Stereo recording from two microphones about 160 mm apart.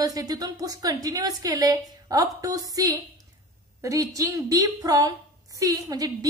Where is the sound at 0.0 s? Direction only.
20° right (ahead or behind).